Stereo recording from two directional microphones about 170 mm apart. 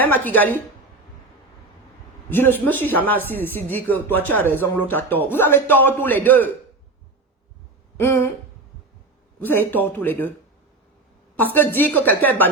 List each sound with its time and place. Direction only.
0.0 s speech: 10° left (ahead or behind)
2.3 s speech: 10° left (ahead or behind)
7.9 s speech: 15° left (ahead or behind)
9.4 s speech: 10° left (ahead or behind)
11.5 s speech: 10° left (ahead or behind)